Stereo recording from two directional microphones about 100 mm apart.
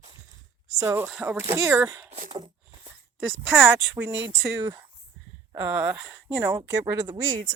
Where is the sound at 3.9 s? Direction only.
20° right (ahead or behind).